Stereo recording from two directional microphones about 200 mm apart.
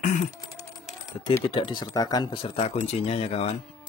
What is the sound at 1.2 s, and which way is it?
Speech, 20° left (ahead or behind).